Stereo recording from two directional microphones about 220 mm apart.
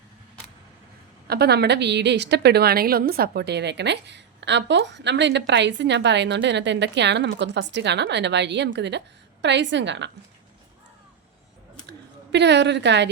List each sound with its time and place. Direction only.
1.3 s a woman's voice: 45° right (ahead or behind)
11.9 s a woman's voice: 50° right (ahead or behind)